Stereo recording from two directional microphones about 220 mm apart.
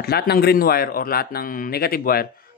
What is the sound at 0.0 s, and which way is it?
Speech, 45° left (ahead or behind).